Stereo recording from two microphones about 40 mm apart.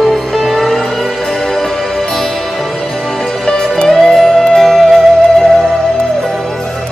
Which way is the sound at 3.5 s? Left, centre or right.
Centre.